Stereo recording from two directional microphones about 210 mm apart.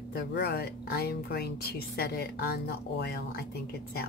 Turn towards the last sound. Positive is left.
turn(degrees=50)  # may be behind; listen again after turning